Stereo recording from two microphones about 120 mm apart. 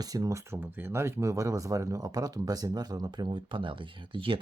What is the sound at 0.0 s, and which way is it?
Speech, 30° right (ahead or behind).